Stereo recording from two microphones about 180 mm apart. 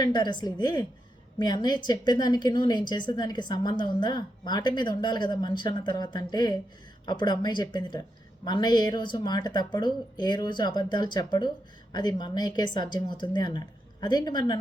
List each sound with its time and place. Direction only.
0.0 s a woman's voice: 25° left (ahead or behind)